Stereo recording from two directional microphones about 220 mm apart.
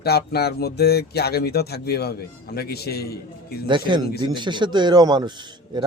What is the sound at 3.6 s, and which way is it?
Speech, 20° right (ahead or behind).